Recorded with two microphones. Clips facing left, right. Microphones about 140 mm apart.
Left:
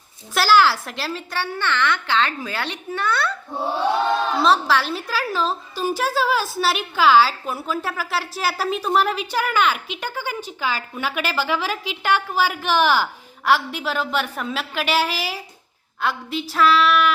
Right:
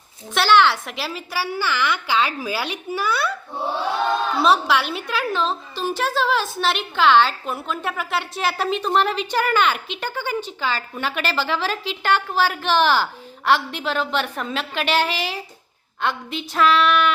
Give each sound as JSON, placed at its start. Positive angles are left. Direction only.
{"t": 0.3, "sound": "a woman's voice", "side_deg": 5}
{"t": 4.4, "sound": "a woman's voice", "side_deg": 0}